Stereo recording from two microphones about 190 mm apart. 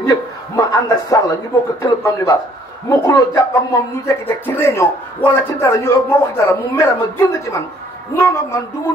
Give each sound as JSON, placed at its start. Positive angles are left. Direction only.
{"t": 0.0, "sound": "a man's voice", "side_deg": 20}